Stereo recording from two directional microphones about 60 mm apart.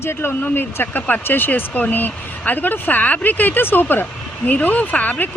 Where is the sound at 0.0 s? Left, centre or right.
Left.